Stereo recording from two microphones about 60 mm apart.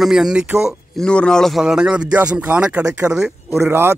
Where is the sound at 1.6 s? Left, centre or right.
Centre.